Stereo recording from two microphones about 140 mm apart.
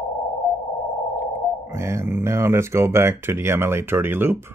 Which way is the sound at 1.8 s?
20° right (ahead or behind).